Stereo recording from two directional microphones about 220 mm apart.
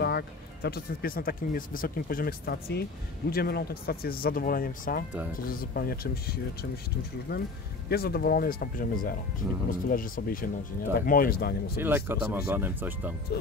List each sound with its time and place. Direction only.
0.0 s speech: 45° left (ahead or behind)
11.8 s speech: 10° right (ahead or behind)